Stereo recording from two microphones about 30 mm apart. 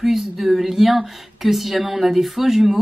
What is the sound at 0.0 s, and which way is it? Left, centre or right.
Speech, centre.